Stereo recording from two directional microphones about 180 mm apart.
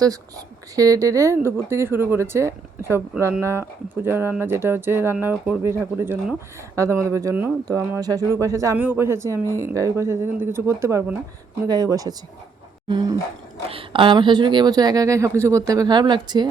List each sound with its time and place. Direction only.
0.0 s speech: 20° right (ahead or behind)